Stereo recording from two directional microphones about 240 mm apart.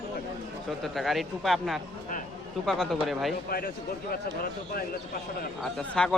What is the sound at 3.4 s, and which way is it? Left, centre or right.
Speech, left.